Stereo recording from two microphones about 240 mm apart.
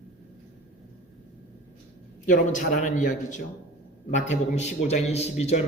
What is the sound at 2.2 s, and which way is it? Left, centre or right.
A man's voice, left.